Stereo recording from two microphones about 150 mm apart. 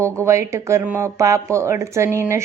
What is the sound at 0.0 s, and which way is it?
A woman's voice, 20° right (ahead or behind).